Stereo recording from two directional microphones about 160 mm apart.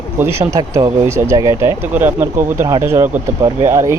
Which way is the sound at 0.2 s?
15° right (ahead or behind).